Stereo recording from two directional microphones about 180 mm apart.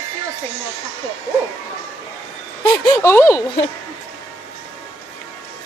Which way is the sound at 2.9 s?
15° left (ahead or behind).